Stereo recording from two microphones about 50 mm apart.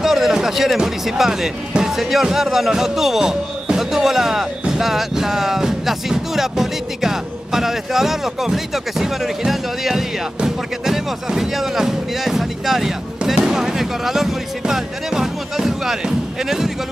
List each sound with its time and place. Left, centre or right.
0.0 s speech: centre